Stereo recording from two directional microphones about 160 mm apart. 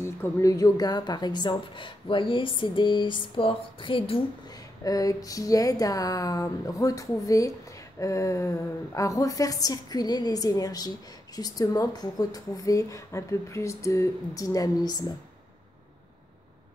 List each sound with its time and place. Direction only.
0.0 s a woman's voice: 20° left (ahead or behind); by 4.2 s 35° left (ahead or behind)
4.8 s a woman's voice: 20° left (ahead or behind)